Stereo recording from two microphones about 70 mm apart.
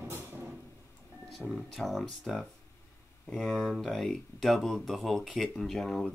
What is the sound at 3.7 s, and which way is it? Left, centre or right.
Speech, centre.